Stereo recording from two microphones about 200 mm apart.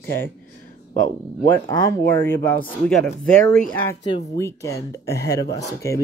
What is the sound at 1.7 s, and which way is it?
Speech, 15° left (ahead or behind).